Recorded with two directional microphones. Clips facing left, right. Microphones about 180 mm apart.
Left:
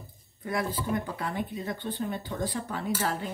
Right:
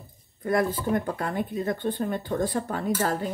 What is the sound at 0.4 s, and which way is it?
Speech, 50° right (ahead or behind).